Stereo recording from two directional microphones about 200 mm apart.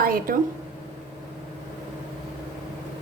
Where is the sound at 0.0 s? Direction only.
45° right (ahead or behind).